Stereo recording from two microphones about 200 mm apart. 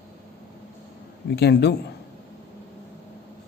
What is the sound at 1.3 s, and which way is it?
Speech, 55° left (ahead or behind).